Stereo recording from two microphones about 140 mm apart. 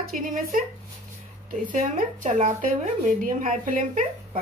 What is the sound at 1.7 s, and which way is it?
Speech, 65° right (ahead or behind).